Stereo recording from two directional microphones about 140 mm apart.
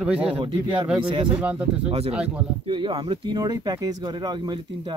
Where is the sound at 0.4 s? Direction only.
35° right (ahead or behind).